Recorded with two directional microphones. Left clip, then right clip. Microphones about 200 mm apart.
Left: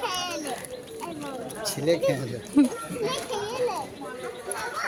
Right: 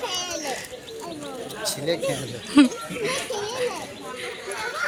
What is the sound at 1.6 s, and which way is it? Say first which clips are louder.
Chatter: left 1 dB; 55° left (ahead or behind).